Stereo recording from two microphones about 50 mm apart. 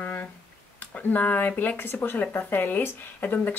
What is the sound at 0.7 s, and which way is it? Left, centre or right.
Speech, left.